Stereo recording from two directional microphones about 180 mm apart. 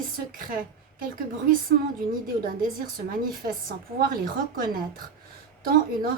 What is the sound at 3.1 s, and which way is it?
Speech, 55° right (ahead or behind).